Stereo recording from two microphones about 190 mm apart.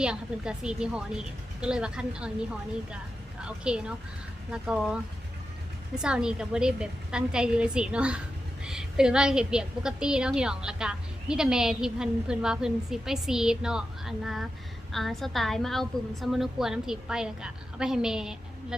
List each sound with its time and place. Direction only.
0.0 s a woman's voice: 5° right (ahead or behind)